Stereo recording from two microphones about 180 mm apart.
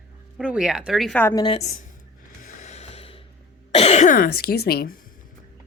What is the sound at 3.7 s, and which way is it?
Speech, 35° left (ahead or behind).